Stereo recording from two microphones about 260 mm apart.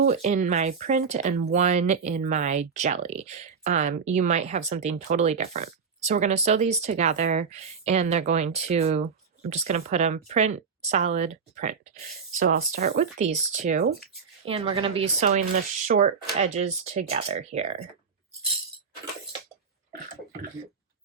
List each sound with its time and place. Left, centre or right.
0.1 s speech: right